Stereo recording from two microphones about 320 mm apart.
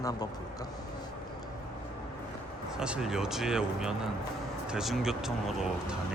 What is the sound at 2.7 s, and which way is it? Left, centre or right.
Speech, centre.